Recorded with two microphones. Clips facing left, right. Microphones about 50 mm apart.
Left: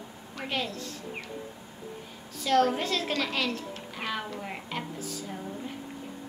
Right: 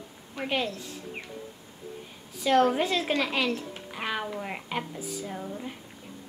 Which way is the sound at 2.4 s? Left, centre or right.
Centre.